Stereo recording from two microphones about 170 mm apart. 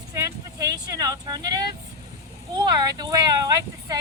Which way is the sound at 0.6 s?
20° right (ahead or behind).